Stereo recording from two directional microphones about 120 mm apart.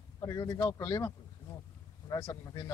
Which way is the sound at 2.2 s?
25° left (ahead or behind).